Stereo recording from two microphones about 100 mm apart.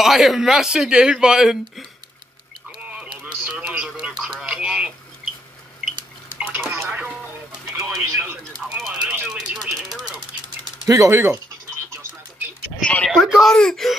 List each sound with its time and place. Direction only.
0.0 s speech: centre (ahead or behind)
2.8 s radio: 15° right (ahead or behind)
6.3 s bathtub: 15° right (ahead or behind)
7.7 s bird: 30° right (ahead or behind)
8.6 s a sound: 10° right (ahead or behind)
10.9 s speech: 30° right (ahead or behind)
12.8 s speech: 10° left (ahead or behind)